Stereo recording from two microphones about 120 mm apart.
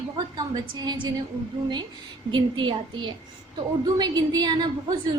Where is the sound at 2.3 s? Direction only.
40° right (ahead or behind).